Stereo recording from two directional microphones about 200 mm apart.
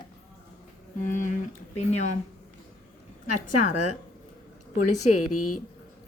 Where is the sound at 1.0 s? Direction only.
40° left (ahead or behind).